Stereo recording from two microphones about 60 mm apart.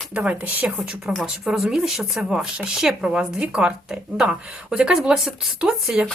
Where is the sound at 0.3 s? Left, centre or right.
Right.